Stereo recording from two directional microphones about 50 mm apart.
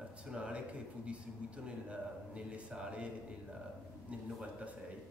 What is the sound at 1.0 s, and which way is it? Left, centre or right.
A man's voice, right.